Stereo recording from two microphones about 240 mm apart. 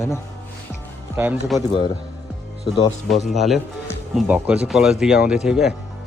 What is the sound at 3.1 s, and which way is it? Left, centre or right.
Speech, centre.